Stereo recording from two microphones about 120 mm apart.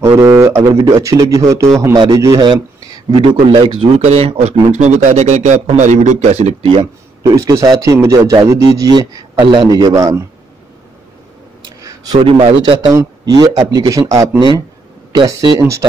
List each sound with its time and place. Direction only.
0.2 s a man's voice: 25° right (ahead or behind); by 3.9 s 45° right (ahead or behind)
4.0 s speech: 60° right (ahead or behind); by 5.6 s 75° right (ahead or behind)
5.8 s speech: 90° right; by 6.7 s 70° right (ahead or behind)
6.7 s speech: 45° right (ahead or behind)
7.3 s a man's voice: 25° right (ahead or behind)
11.8 s a sound: 30° right (ahead or behind)
12.2 s a man's voice: 50° right (ahead or behind)
12.9 s a man's voice: 30° right (ahead or behind)